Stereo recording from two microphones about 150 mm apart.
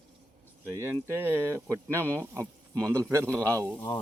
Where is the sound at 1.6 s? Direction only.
10° left (ahead or behind).